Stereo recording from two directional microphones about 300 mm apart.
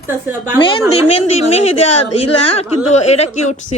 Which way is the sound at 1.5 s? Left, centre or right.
Left.